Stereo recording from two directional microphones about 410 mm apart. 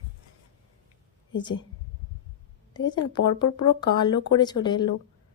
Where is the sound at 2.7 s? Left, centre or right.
Centre.